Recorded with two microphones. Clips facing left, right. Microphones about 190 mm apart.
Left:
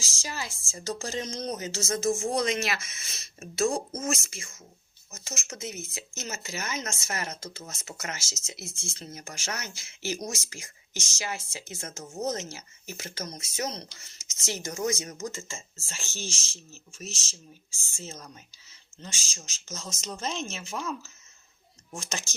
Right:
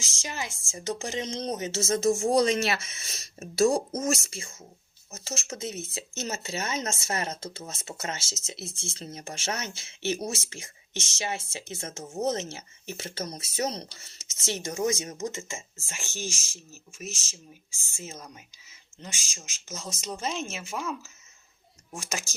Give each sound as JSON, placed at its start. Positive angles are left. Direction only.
{"t": 0.0, "sound": "speech", "side_deg": -20}
{"t": 17.9, "sound": "speech", "side_deg": -10}
{"t": 21.9, "sound": "speech", "side_deg": -10}